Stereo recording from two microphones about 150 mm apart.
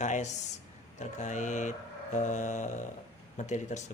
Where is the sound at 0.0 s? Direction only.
50° left (ahead or behind).